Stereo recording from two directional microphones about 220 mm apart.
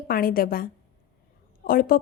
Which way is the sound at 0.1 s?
40° left (ahead or behind).